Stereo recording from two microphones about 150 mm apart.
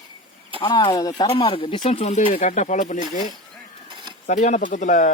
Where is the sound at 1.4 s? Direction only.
35° left (ahead or behind); by 3.3 s 55° left (ahead or behind).